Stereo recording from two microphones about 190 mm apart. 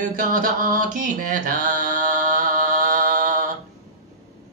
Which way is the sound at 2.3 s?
45° right (ahead or behind).